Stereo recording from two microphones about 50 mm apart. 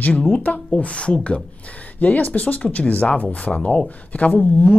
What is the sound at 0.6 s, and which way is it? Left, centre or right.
Speech, left.